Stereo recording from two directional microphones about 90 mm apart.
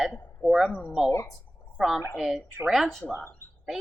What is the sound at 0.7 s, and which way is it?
Speech, 20° left (ahead or behind).